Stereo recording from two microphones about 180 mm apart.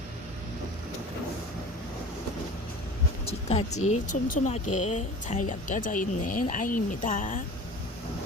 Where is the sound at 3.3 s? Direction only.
35° left (ahead or behind).